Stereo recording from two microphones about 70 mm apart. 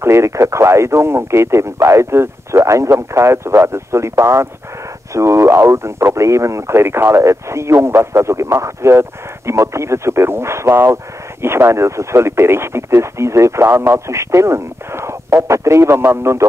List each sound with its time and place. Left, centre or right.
0.0 s speech: right